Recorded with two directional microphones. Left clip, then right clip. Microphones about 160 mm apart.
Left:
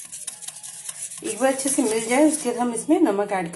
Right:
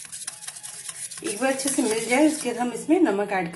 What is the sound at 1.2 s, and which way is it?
A woman's voice, 5° right (ahead or behind).